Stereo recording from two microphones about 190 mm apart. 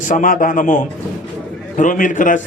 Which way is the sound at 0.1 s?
45° left (ahead or behind).